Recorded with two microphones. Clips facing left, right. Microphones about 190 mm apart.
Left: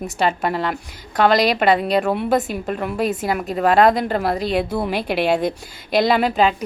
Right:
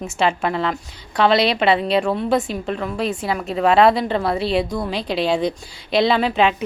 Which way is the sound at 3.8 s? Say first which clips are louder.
Even; 45° left (ahead or behind).